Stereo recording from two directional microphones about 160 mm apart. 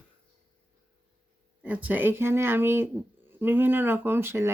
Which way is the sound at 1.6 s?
10° right (ahead or behind).